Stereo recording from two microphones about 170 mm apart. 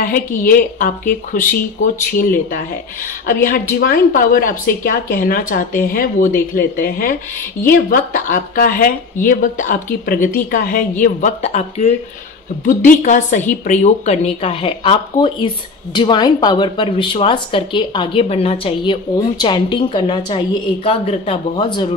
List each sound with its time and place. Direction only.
0.0 s speech: 55° left (ahead or behind)
3.8 s speech: 55° left (ahead or behind); by 11.9 s 40° left (ahead or behind)
12.6 s speech: 50° left (ahead or behind); by 21.9 s 25° left (ahead or behind)